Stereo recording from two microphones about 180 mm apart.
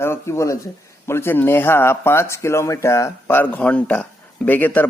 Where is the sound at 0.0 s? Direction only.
15° left (ahead or behind).